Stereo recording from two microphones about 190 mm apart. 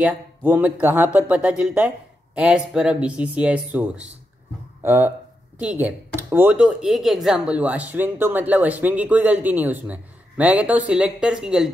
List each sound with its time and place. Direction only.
0.0 s speech: 10° right (ahead or behind)